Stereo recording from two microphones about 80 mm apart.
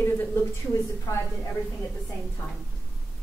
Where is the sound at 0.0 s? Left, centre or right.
Left.